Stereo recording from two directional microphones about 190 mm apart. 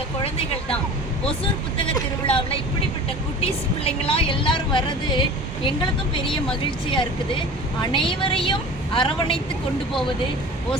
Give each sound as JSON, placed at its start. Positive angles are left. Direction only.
{"t": 1.8, "sound": "a woman's voice", "side_deg": 25}
{"t": 7.8, "sound": "a woman's voice", "side_deg": 25}